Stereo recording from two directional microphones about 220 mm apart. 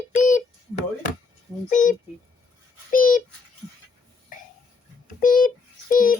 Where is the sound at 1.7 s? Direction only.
35° left (ahead or behind).